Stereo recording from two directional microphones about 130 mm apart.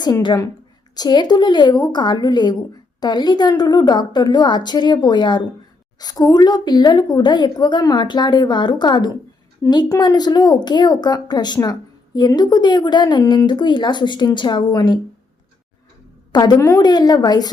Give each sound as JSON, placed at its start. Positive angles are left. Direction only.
{"t": 0.0, "sound": "speech", "side_deg": 35}
{"t": 16.3, "sound": "speech", "side_deg": 35}